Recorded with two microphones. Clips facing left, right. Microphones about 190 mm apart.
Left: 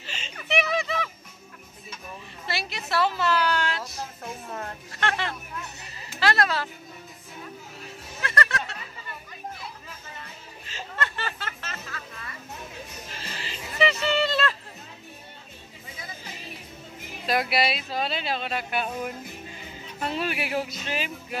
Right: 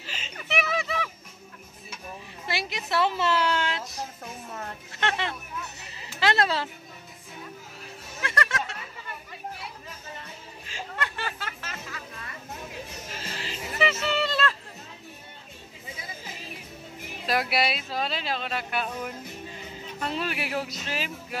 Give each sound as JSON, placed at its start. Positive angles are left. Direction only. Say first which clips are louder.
{"t": 0.0, "sound": "music", "louder": "even", "side_deg": -5}
{"t": 2.4, "sound": "a child's voice", "louder": "right 1 dB", "side_deg": -15}
{"t": 5.0, "sound": "speech", "louder": "even", "side_deg": -20}
{"t": 8.2, "sound": "music", "louder": "left 2 dB", "side_deg": -10}
{"t": 10.7, "sound": "music", "louder": "left 1 dB", "side_deg": -10}
{"t": 13.4, "sound": "music", "louder": "left 2 dB", "side_deg": 0}
{"t": 14.0, "sound": "a sound", "louder": "left 2 dB", "side_deg": -5}
{"t": 17.3, "sound": "speech", "louder": "left 1 dB", "side_deg": 0}